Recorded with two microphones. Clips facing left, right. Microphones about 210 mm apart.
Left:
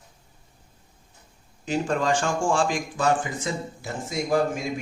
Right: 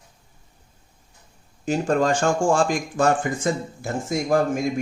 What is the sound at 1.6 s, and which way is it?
A man's voice, 45° right (ahead or behind).